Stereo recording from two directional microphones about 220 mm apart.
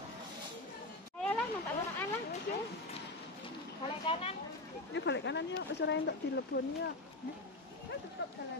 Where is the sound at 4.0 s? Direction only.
25° left (ahead or behind).